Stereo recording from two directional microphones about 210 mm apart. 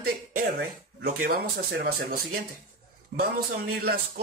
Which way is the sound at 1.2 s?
45° right (ahead or behind).